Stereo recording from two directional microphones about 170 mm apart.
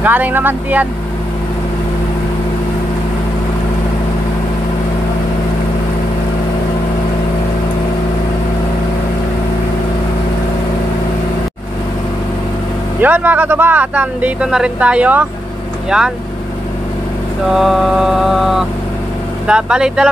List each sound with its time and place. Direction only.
0.0 s speech: 10° right (ahead or behind)
13.0 s speech: 10° right (ahead or behind)
15.9 s mantra: 5° right (ahead or behind)
17.6 s mantra: centre (ahead or behind)